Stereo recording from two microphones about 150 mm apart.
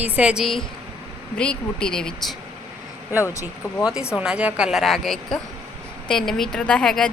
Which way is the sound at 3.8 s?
5° right (ahead or behind).